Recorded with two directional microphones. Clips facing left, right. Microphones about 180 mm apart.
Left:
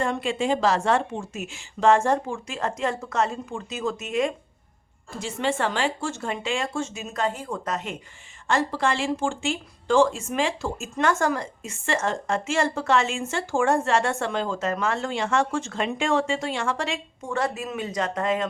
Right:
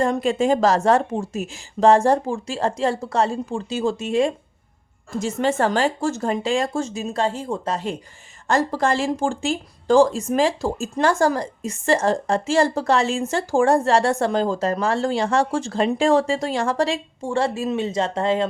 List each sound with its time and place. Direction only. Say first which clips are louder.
0.0 s speech: right 6 dB; 40° right (ahead or behind)
5.2 s speech: right 5 dB; 40° right (ahead or behind)